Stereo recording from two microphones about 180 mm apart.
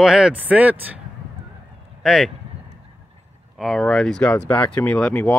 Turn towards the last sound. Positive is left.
turn(degrees=10)  # may be behind; listen again after turning